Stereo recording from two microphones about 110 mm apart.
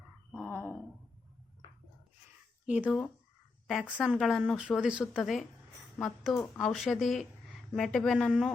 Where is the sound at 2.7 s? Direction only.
15° right (ahead or behind).